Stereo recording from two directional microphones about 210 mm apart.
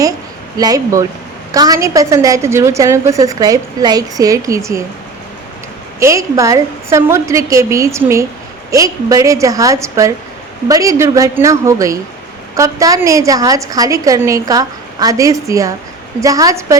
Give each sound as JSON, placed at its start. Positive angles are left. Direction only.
{"t": 0.5, "sound": "a woman's voice", "side_deg": -15}
{"t": 6.0, "sound": "a woman's voice", "side_deg": -15}